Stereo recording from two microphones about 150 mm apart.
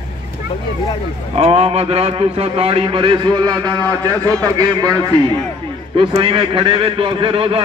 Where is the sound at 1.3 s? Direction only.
40° right (ahead or behind).